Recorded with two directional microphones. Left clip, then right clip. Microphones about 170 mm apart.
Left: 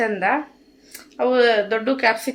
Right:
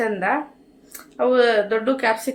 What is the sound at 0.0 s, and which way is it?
Speech, 10° left (ahead or behind).